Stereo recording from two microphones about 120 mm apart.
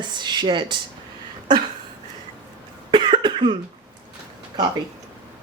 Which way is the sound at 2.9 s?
40° right (ahead or behind).